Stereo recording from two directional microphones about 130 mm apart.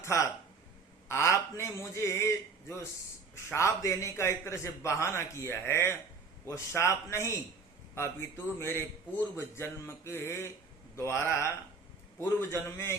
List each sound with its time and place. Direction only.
0.0 s a man's voice: 20° left (ahead or behind)